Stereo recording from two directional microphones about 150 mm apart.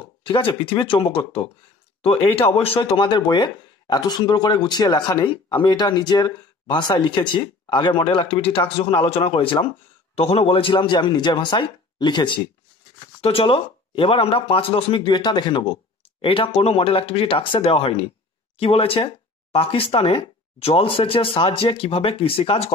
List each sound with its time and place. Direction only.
0.2 s speech: 35° left (ahead or behind)